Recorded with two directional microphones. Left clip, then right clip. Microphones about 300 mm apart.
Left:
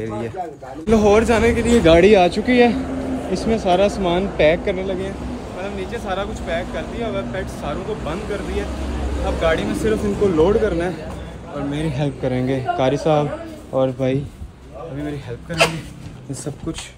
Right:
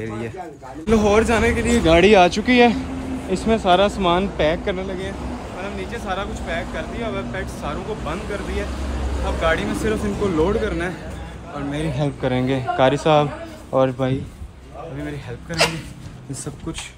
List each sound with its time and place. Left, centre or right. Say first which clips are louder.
0.0 s speech: left 4 dB; centre
13.1 s a man's voice: right 1 dB; right
15.5 s speech: left 2 dB; centre